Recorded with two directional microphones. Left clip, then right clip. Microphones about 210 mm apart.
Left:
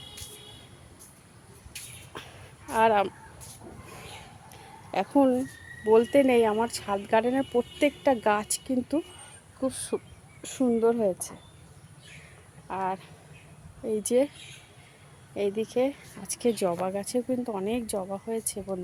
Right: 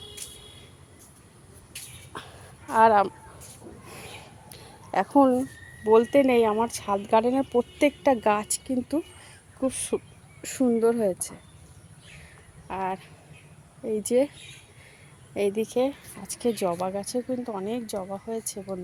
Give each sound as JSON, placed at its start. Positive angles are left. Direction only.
{"t": 1.7, "sound": "a sound", "side_deg": -10}
{"t": 4.5, "sound": "speech", "side_deg": -15}
{"t": 9.6, "sound": "speech", "side_deg": -15}
{"t": 12.6, "sound": "speech", "side_deg": -5}
{"t": 15.4, "sound": "speech", "side_deg": -20}